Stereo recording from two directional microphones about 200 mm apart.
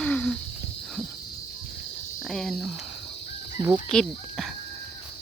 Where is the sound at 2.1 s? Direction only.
Centre (ahead or behind).